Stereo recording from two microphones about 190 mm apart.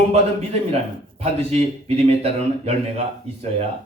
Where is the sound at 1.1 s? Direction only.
35° right (ahead or behind).